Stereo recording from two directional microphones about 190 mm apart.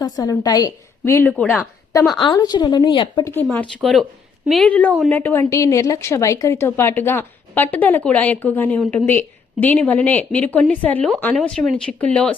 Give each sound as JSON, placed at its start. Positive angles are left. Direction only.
{"t": 0.0, "sound": "a woman's voice", "side_deg": 20}
{"t": 1.3, "sound": "speech", "side_deg": 5}
{"t": 2.1, "sound": "speech", "side_deg": 20}
{"t": 3.8, "sound": "a woman's voice", "side_deg": 0}